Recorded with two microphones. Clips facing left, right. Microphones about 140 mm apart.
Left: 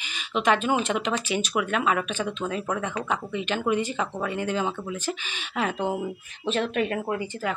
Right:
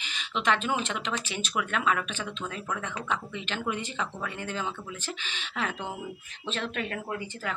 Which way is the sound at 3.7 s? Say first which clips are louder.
Left 7 dB; 10° left (ahead or behind).